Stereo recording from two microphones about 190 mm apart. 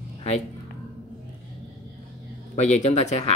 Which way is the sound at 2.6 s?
35° left (ahead or behind).